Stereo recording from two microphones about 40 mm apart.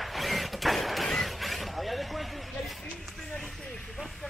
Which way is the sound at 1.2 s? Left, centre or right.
Centre.